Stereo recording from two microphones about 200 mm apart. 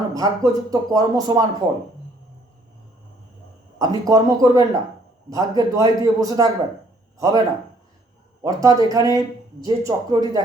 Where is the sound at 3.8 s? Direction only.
15° right (ahead or behind).